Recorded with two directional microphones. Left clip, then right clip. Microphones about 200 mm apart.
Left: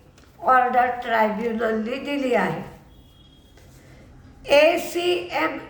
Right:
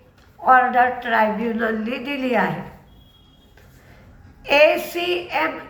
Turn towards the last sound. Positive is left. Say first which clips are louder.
# right 1 dB
turn(degrees=10)  # may be behind; listen again after turning